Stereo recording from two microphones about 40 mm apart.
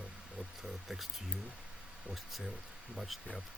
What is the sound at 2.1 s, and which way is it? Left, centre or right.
Speech, centre.